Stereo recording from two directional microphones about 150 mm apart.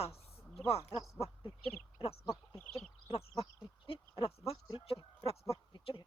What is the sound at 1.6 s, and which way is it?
Speech, 10° left (ahead or behind).